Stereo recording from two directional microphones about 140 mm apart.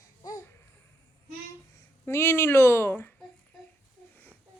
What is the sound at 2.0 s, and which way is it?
Speech, 20° left (ahead or behind).